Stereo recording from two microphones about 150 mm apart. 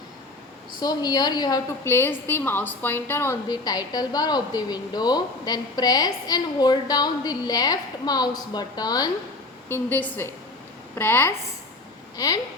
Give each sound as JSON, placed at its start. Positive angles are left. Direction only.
{"t": 0.8, "sound": "a woman's voice", "side_deg": 25}
{"t": 3.5, "sound": "a woman's voice", "side_deg": 25}
{"t": 9.6, "sound": "a woman's voice", "side_deg": 15}